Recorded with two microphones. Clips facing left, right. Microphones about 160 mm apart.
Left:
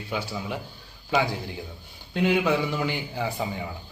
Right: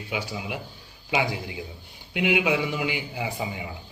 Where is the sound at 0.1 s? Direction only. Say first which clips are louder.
Left 1 dB; 10° right (ahead or behind).